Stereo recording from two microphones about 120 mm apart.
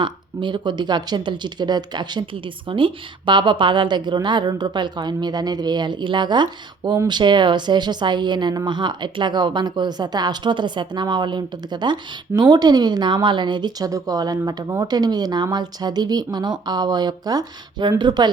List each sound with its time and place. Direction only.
0.0 s speech: 40° right (ahead or behind)